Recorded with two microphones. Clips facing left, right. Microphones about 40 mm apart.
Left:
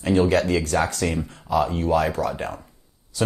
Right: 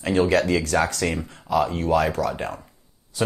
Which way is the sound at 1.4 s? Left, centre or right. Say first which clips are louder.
Even; right.